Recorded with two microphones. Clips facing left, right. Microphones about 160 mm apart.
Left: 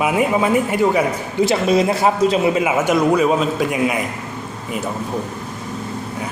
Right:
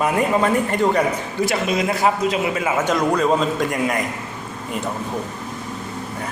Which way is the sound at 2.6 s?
10° left (ahead or behind).